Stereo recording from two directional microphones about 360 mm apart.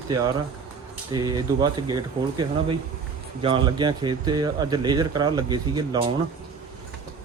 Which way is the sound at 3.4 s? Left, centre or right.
Centre.